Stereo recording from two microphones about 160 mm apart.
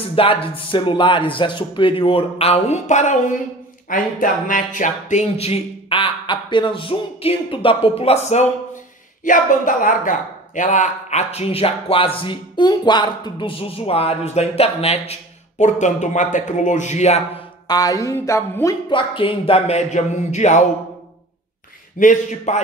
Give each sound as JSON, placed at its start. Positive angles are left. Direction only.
{"t": 0.1, "sound": "speech", "side_deg": 35}
{"t": 9.2, "sound": "speech", "side_deg": 55}
{"t": 17.6, "sound": "speech", "side_deg": 25}
{"t": 18.9, "sound": "speech", "side_deg": 30}
{"t": 21.9, "sound": "a man's voice", "side_deg": 55}